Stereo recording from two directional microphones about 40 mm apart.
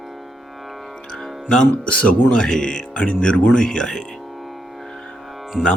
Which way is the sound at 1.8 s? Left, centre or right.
Left.